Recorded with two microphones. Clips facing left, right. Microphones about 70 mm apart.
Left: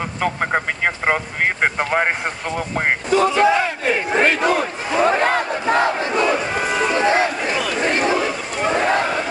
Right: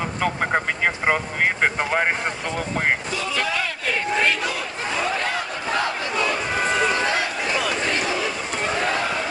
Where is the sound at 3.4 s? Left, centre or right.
Left.